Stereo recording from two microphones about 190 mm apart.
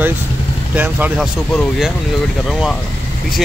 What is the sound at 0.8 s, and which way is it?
Speech, 10° right (ahead or behind).